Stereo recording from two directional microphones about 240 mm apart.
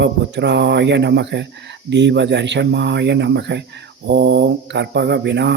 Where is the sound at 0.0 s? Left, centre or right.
Right.